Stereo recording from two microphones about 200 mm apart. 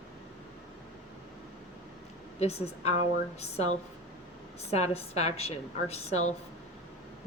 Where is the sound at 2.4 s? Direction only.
30° left (ahead or behind).